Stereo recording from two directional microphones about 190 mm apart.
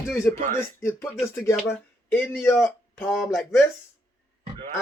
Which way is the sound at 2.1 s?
10° left (ahead or behind).